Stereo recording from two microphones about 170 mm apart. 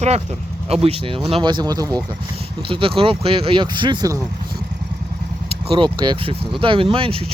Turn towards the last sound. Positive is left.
turn(degrees=-30)  # may be behind; listen again after turning